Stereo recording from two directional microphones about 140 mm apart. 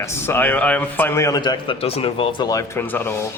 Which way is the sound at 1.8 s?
45° left (ahead or behind).